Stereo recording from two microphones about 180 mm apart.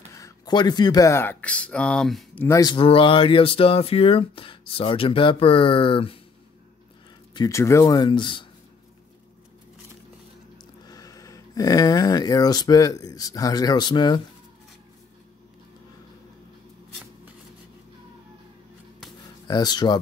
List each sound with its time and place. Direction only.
0.1 s speech: 20° left (ahead or behind); by 2.4 s 5° left (ahead or behind)
2.4 s speech: 20° left (ahead or behind)
7.3 s speech: 20° left (ahead or behind)
10.9 s speech: 20° left (ahead or behind)
19.4 s speech: 20° left (ahead or behind)